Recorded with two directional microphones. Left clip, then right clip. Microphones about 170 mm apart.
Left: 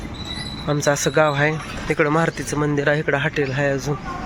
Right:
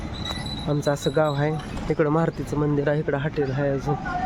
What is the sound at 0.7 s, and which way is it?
Speech, centre (ahead or behind).